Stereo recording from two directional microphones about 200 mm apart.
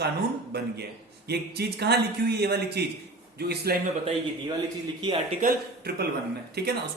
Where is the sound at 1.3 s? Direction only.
55° right (ahead or behind).